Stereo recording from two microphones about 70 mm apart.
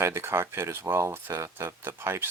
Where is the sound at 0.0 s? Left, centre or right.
Right.